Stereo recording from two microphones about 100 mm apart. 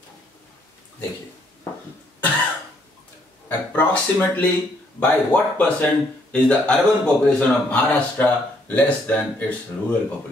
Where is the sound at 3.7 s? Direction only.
20° left (ahead or behind).